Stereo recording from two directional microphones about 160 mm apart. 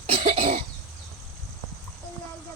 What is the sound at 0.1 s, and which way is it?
Cough, 35° right (ahead or behind).